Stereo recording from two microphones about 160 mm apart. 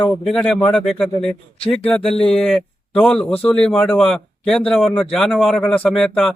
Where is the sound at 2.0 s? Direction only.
35° left (ahead or behind).